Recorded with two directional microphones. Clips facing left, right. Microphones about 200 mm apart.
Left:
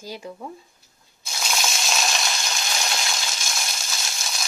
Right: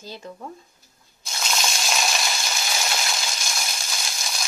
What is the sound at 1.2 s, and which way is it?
Frying, 5° left (ahead or behind).